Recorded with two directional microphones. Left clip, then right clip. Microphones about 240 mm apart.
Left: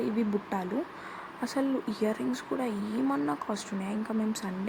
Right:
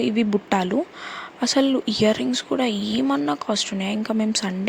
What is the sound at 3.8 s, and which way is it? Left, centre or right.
Speech, right.